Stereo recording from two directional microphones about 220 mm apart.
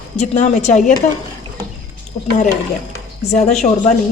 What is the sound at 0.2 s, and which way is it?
Speech, 30° left (ahead or behind).